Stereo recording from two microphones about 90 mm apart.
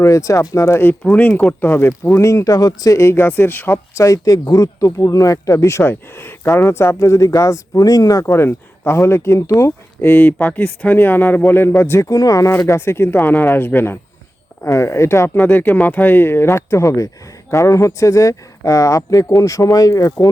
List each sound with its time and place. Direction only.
0.0 s speech: 35° left (ahead or behind)
4.0 s speech: 40° left (ahead or behind)
10.1 s speech: 20° left (ahead or behind)
15.4 s speech: 20° left (ahead or behind); by 20.3 s 40° left (ahead or behind)